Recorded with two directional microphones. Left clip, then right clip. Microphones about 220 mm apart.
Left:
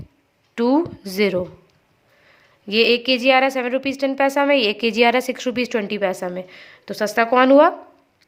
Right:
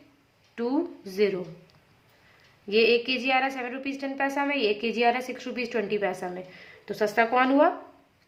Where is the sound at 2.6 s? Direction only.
45° left (ahead or behind).